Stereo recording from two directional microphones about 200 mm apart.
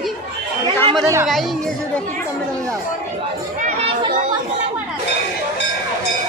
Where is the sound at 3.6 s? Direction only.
40° right (ahead or behind).